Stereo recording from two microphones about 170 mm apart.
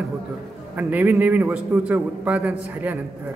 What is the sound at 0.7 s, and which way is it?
A man's voice, 10° right (ahead or behind).